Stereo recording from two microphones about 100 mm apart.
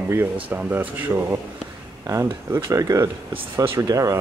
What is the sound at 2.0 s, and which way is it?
Speech, 30° right (ahead or behind).